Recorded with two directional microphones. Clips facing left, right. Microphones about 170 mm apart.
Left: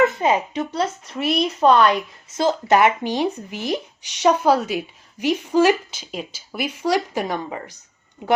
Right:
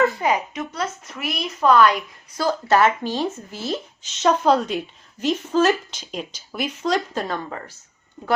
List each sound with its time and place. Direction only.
0.0 s speech: 25° left (ahead or behind)